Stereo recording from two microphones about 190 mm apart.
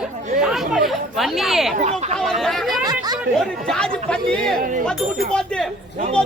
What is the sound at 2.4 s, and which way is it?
Speech, centre (ahead or behind).